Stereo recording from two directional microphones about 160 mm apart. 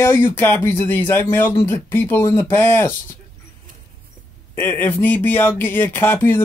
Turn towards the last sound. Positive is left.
turn(degrees=15)  # may be behind; listen again after turning